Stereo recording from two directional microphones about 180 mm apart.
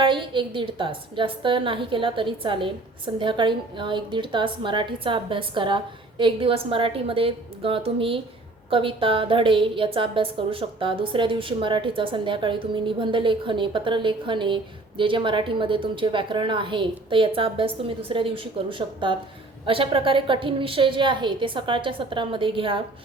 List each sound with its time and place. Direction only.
0.0 s a woman's voice: 25° right (ahead or behind)